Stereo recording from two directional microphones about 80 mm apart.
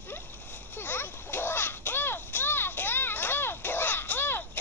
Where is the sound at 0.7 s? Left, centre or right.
Left.